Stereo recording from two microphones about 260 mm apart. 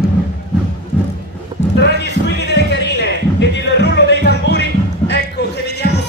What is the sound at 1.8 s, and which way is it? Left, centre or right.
Music, left.